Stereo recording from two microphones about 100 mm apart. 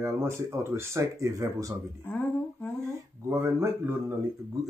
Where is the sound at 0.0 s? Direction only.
25° right (ahead or behind).